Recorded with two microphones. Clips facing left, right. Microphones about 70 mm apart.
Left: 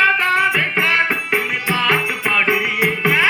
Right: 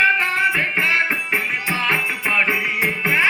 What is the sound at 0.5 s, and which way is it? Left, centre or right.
Music, left.